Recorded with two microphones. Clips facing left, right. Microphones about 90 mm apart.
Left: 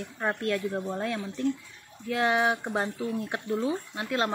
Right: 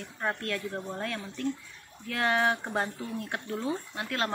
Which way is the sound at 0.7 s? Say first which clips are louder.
Left 4 dB; 15° left (ahead or behind).